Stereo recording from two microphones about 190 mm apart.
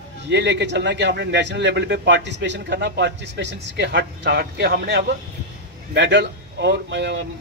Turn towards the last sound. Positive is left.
turn(degrees=-65)  # may be behind; listen again after turning